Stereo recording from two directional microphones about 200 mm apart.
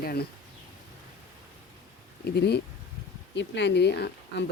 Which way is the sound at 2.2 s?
55° left (ahead or behind).